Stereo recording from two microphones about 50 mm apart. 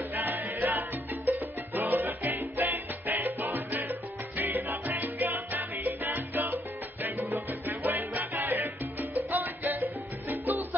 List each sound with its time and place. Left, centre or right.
0.1 s music: right
4.8 s salsa music: right
7.3 s music: right